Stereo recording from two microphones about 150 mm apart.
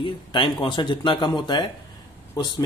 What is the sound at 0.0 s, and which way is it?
Speech, 35° left (ahead or behind).